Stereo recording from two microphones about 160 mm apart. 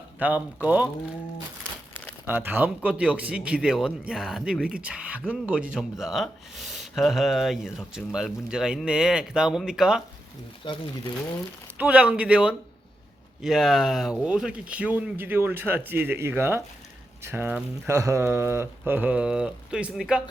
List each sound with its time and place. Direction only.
0.2 s a man's voice: 10° right (ahead or behind)
2.2 s a man's voice: 10° right (ahead or behind)
10.6 s speech: 35° left (ahead or behind)
11.8 s a man's voice: 10° right (ahead or behind)